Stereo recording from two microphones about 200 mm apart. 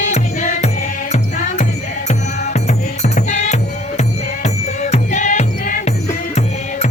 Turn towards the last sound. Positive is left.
turn(degrees=40)  # may be behind; listen again after turning